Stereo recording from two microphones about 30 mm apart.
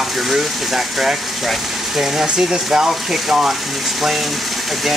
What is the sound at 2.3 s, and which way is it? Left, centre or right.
Speech, right.